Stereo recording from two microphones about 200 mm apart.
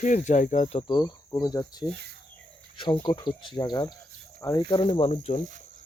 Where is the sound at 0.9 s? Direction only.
20° left (ahead or behind).